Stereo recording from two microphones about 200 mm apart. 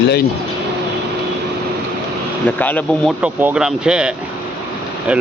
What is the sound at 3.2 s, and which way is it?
Speech, 5° right (ahead or behind).